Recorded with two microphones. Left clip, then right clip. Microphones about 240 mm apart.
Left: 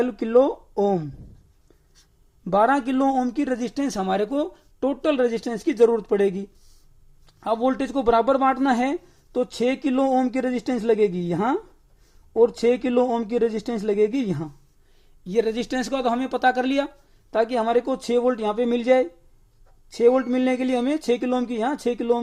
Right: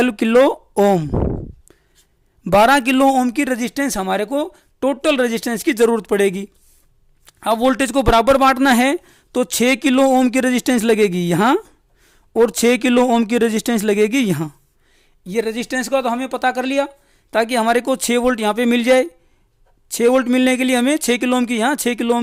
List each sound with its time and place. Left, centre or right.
0.0 s speech: right
2.4 s a man's voice: right
14.9 s speech: right
17.3 s speech: right